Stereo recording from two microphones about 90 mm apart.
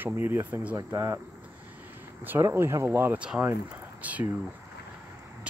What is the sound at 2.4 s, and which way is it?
Speech, 30° right (ahead or behind).